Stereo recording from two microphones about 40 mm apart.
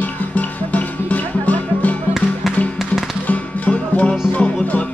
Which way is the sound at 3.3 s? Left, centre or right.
Left.